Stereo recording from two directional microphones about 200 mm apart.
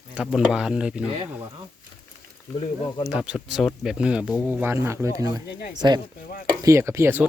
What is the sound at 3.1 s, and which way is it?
Speech, 5° right (ahead or behind).